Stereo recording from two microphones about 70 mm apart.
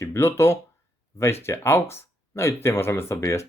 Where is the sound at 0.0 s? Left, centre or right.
Left.